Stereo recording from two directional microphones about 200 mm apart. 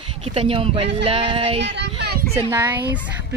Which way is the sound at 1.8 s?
60° right (ahead or behind).